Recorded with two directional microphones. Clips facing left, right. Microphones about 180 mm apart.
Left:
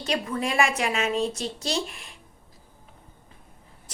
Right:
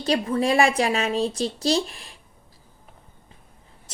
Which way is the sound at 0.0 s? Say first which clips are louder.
Right 5 dB; 35° right (ahead or behind).